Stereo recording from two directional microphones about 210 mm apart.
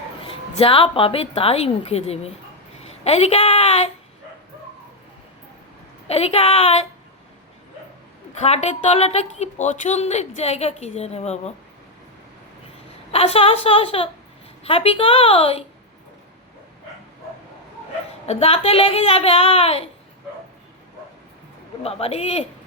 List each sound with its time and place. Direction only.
0.3 s a woman's voice: 25° left (ahead or behind)
6.1 s a woman's voice: 30° left (ahead or behind)
8.4 s a woman's voice: 30° left (ahead or behind)
13.1 s a woman's voice: 30° left (ahead or behind)
18.3 s a woman's voice: 30° left (ahead or behind)
21.8 s a woman's voice: 30° left (ahead or behind)